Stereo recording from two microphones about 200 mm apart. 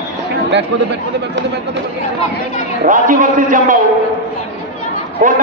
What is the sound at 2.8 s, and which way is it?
Speech, 40° right (ahead or behind).